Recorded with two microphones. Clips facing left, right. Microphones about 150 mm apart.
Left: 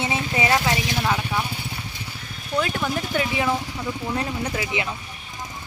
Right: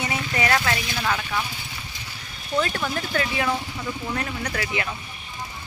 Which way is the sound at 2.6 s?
10° left (ahead or behind).